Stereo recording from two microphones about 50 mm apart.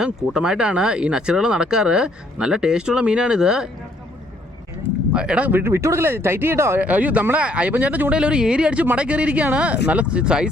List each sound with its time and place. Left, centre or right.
0.0 s speech: centre
5.1 s speech: right
5.5 s speech: right
6.7 s speech: right
8.1 s speech: centre